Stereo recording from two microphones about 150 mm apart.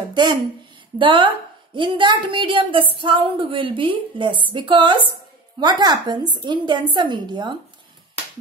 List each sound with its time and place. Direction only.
0.1 s a woman's voice: 30° right (ahead or behind)